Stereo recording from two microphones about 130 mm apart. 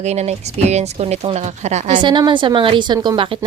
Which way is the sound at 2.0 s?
40° right (ahead or behind).